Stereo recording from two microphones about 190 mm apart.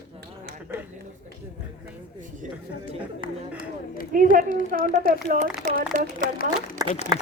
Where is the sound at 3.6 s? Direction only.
50° left (ahead or behind).